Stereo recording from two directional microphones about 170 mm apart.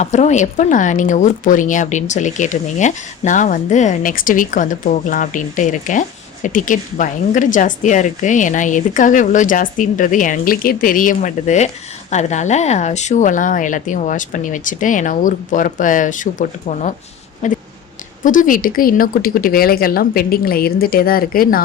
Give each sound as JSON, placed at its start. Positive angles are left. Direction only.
{"t": 0.0, "sound": "speech", "side_deg": 45}